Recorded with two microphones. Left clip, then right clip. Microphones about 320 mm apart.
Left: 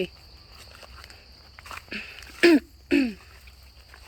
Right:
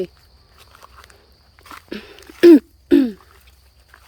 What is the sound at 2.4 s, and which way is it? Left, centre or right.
Throat clearing, right.